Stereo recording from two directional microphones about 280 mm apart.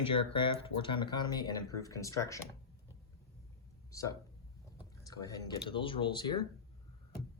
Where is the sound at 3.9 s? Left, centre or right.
Centre.